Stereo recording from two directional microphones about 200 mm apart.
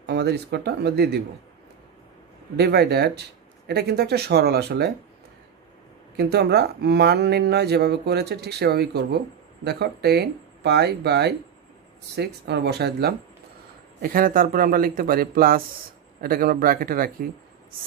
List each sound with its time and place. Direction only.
0.0 s speech: 55° right (ahead or behind)
2.5 s speech: 55° right (ahead or behind)
6.1 s speech: 55° right (ahead or behind)